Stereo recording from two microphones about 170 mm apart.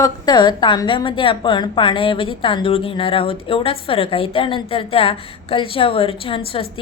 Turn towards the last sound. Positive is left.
turn(degrees=30)  # may be behind; listen again after turning